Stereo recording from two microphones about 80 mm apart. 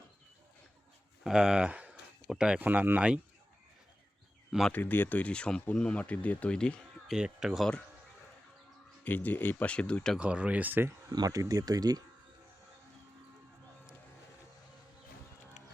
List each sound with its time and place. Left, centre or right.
1.2 s a sound: centre
2.6 s speech: right
4.7 s speech: left
7.1 s speech: centre
9.0 s speech: left
10.2 s speech: centre
11.1 s speech: right